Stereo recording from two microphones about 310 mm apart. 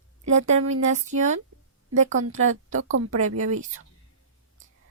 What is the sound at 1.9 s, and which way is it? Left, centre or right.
Speech, right.